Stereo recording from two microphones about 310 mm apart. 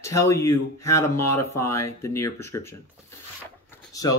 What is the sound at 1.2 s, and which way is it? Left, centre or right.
Speech, left.